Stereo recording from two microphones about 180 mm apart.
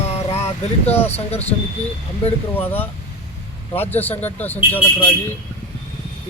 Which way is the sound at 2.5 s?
10° left (ahead or behind).